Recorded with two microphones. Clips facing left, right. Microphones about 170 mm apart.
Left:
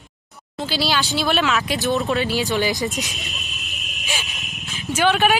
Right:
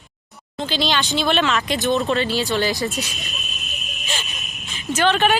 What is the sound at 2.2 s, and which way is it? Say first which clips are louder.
Speech: even; 10° left (ahead or behind).